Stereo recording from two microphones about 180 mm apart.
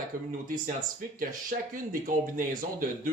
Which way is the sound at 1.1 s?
45° right (ahead or behind).